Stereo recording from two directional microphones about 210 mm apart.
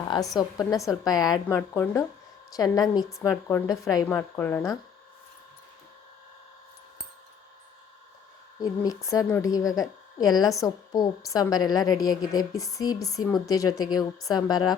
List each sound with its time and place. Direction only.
0.3 s a woman's voice: 20° left (ahead or behind)
8.6 s a woman's voice: 15° left (ahead or behind)